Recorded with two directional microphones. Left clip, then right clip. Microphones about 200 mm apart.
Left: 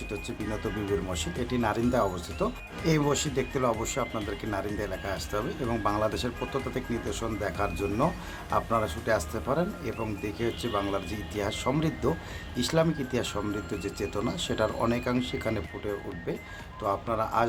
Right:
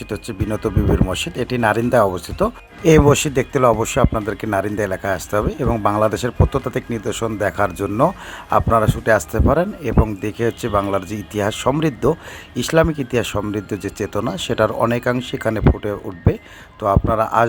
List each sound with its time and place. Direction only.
0.6 s speech: 35° right (ahead or behind)